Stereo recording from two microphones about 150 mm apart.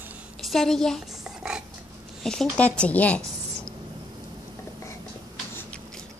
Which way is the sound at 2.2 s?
5° left (ahead or behind).